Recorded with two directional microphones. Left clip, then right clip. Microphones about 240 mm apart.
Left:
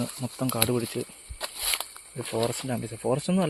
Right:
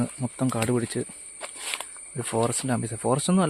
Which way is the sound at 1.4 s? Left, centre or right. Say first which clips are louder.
Left 3 dB; left.